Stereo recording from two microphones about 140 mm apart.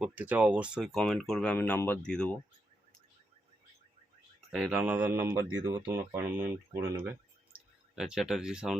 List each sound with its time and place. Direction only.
0.0 s speech: 10° right (ahead or behind); by 2.3 s 5° left (ahead or behind)
4.4 s a sound: 5° right (ahead or behind)
4.8 s speech: 10° right (ahead or behind)
5.5 s speech: 25° right (ahead or behind)
5.8 s speech: 15° right (ahead or behind)
7.0 s clicking: 15° right (ahead or behind)
7.9 s speech: 5° right (ahead or behind)